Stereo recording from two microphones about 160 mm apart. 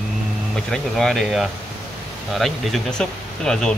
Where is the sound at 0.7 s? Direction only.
Centre (ahead or behind).